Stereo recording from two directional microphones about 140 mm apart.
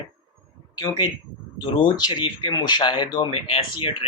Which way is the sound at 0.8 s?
30° left (ahead or behind).